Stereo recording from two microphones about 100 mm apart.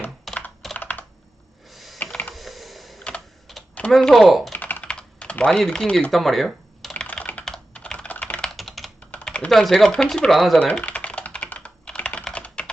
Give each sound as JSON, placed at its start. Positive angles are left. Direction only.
{"t": 0.3, "sound": "computer keyboard", "side_deg": 0}
{"t": 0.8, "sound": "computer keyboard", "side_deg": 20}
{"t": 1.7, "sound": "computer keyboard", "side_deg": 0}
{"t": 3.5, "sound": "typing", "side_deg": 0}
{"t": 3.9, "sound": "speech", "side_deg": 0}
{"t": 4.5, "sound": "typing", "side_deg": 15}
{"t": 6.9, "sound": "computer keyboard", "side_deg": 10}
{"t": 8.4, "sound": "computer keyboard", "side_deg": 0}
{"t": 9.0, "sound": "speech", "side_deg": 10}
{"t": 10.7, "sound": "typing", "side_deg": 15}